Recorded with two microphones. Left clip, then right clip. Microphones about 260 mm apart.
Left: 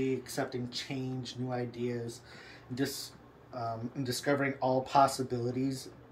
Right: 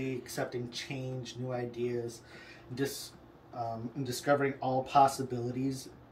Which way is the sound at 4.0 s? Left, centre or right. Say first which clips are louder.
Right 2 dB; centre.